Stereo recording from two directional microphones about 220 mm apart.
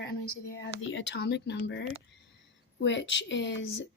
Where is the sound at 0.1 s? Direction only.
70° left (ahead or behind).